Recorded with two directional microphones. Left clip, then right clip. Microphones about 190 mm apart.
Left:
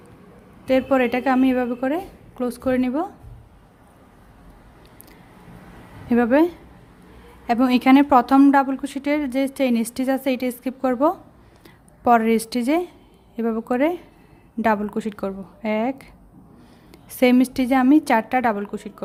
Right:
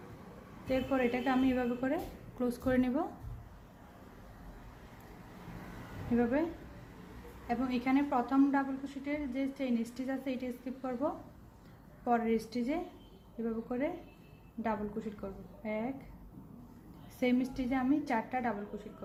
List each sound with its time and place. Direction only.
0.7 s a woman's voice: 50° left (ahead or behind); by 3.1 s 35° left (ahead or behind)
7.4 s a woman's voice: 55° left (ahead or behind)
17.2 s a woman's voice: 55° left (ahead or behind)